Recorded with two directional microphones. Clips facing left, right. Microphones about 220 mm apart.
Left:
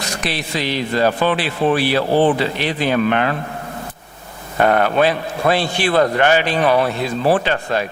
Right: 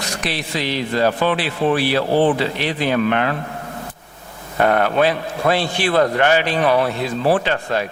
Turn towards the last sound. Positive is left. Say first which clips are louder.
# left 1 dB
turn(degrees=15)  # may be behind; listen again after turning